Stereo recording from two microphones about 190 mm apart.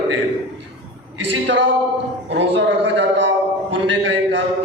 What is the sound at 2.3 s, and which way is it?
Speech, 70° right (ahead or behind).